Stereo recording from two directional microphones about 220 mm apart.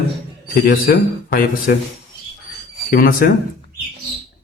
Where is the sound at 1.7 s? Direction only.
45° left (ahead or behind).